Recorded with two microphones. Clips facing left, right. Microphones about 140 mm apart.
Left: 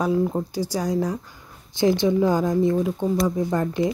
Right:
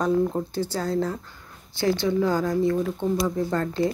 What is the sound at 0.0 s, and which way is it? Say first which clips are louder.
Speech: left 1 dB; 10° left (ahead or behind).